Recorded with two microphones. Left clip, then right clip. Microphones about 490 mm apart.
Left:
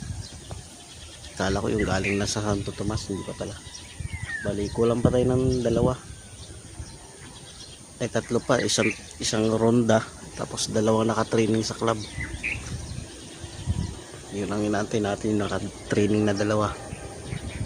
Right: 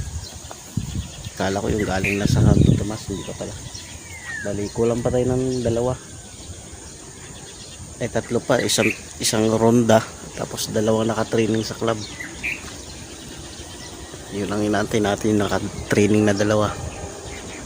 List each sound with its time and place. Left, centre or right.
1.4 s speech: left
4.8 s speech: left
7.9 s speech: left
14.3 s speech: left